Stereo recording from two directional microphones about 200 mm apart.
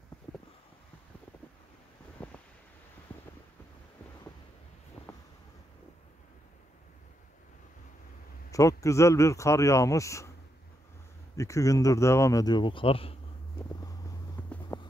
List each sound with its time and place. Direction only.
2.2 s wind noise: 5° left (ahead or behind)
8.5 s speech: 15° left (ahead or behind)
11.3 s speech: 15° left (ahead or behind)
13.7 s vehicle: 15° left (ahead or behind)
14.4 s a sound: 10° left (ahead or behind)